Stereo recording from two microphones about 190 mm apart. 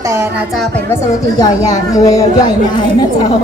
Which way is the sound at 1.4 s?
20° left (ahead or behind).